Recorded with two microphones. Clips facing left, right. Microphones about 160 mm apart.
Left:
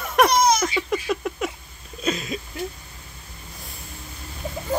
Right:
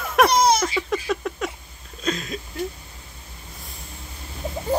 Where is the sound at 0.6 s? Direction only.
5° left (ahead or behind).